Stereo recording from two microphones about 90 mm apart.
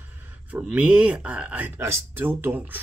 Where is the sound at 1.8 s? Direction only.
25° right (ahead or behind).